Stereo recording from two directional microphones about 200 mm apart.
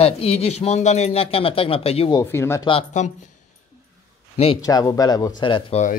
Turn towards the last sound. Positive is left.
turn(degrees=25)  # may be behind; listen again after turning